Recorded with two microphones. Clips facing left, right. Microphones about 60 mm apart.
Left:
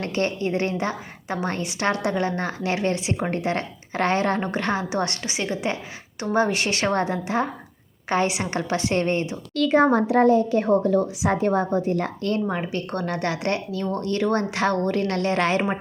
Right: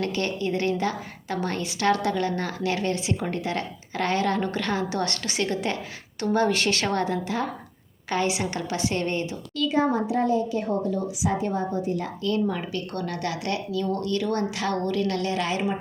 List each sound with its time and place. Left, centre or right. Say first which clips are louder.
0.0 s a woman's voice: left 2 dB; left
9.6 s a woman's voice: left 5 dB; left
12.5 s speech: left 3 dB; left